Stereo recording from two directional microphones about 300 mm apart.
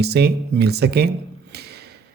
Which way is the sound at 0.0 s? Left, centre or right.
Right.